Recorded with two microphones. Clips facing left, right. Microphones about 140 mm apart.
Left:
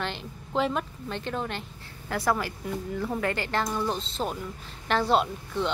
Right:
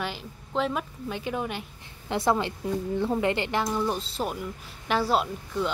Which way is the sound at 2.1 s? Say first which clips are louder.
Right 2 dB; 25° right (ahead or behind).